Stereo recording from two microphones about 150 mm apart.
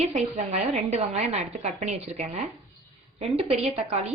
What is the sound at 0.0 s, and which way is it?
A woman's voice, 50° right (ahead or behind).